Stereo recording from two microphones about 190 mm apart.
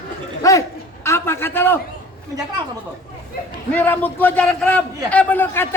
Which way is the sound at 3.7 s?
10° left (ahead or behind).